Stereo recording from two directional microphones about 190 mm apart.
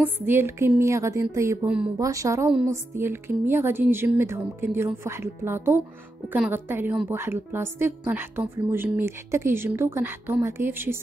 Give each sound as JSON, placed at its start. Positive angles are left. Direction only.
{"t": 0.0, "sound": "a woman's voice", "side_deg": -10}